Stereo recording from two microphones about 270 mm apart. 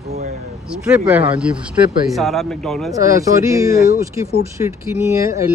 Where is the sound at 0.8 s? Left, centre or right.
Centre.